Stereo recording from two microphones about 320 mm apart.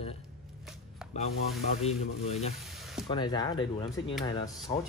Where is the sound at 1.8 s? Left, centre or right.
Centre.